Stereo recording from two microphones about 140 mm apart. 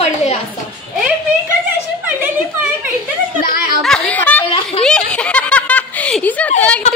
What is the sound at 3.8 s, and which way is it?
Chatter, 5° left (ahead or behind).